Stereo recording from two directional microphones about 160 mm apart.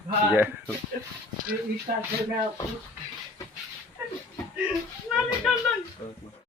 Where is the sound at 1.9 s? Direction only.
45° right (ahead or behind).